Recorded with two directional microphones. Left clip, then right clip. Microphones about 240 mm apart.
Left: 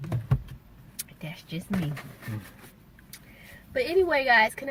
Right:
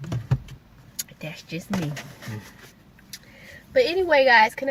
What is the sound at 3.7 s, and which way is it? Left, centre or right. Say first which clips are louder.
Speech: right 5 dB; centre.